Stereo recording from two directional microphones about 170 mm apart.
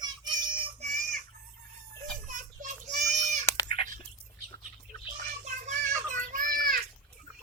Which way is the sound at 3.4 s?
20° left (ahead or behind).